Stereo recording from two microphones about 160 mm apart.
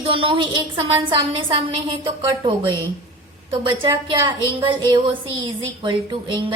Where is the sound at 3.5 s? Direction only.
30° right (ahead or behind).